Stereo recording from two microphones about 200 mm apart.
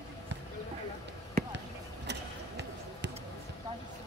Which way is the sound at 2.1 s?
60° right (ahead or behind).